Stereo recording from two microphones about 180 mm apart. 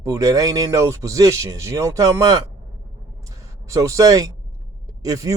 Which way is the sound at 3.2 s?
20° right (ahead or behind).